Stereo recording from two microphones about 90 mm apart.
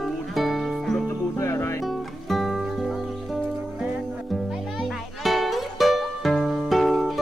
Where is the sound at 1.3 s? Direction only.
35° left (ahead or behind).